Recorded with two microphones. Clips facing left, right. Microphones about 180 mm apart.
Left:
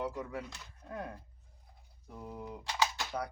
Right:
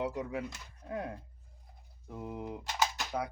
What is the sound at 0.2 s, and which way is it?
Speech, 10° right (ahead or behind).